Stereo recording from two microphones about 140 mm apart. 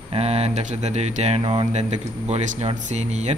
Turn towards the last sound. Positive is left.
turn(degrees=-55)  # may be behind; listen again after turning